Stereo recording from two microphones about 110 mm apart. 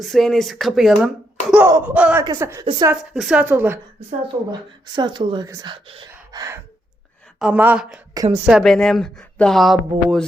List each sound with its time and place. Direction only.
0.0 s speech: centre (ahead or behind)
1.0 s speech: 10° right (ahead or behind)
2.4 s a woman's voice: 25° right (ahead or behind)
2.9 s speech: 5° right (ahead or behind)
3.4 s speech: 20° right (ahead or behind)
4.9 s speech: 45° right (ahead or behind)
6.3 s gasp: 30° right (ahead or behind)
7.3 s speech: 10° right (ahead or behind)
8.1 s a woman's voice: 35° right (ahead or behind)
8.4 s speech: centre (ahead or behind)